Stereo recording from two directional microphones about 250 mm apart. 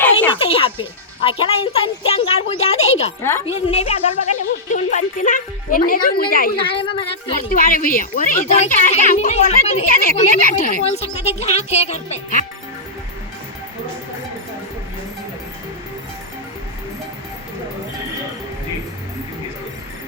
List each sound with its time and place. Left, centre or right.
0.3 s speech: left
3.2 s a woman's voice: centre
3.4 s speech: left
6.6 s speech: centre
7.5 s speech: left